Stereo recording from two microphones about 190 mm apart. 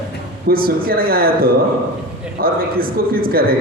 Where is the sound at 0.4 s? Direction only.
50° right (ahead or behind).